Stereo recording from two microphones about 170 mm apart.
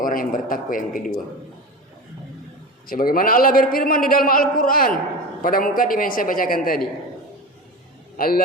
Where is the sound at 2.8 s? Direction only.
55° left (ahead or behind).